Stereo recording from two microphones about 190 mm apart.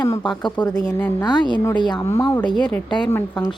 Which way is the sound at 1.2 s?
25° left (ahead or behind).